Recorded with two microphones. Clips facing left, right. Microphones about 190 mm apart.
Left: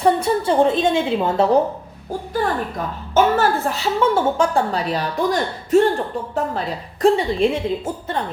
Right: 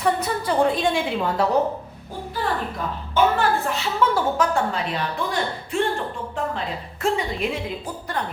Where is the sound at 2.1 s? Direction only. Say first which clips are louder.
Left 5 dB; 45° left (ahead or behind).